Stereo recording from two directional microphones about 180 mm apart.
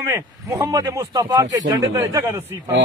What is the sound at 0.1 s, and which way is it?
A man's voice, 15° right (ahead or behind).